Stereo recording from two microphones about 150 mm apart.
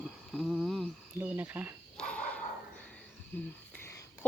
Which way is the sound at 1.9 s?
5° left (ahead or behind).